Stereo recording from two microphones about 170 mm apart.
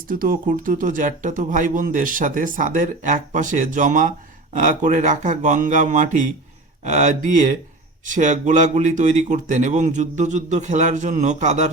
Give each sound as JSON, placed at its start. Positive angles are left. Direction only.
{"t": 0.1, "sound": "speech", "side_deg": -55}